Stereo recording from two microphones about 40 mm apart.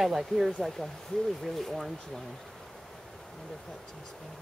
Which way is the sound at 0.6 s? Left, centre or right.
Centre.